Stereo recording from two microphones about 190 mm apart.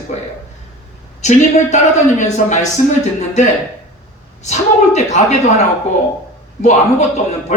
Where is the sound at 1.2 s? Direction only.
40° left (ahead or behind).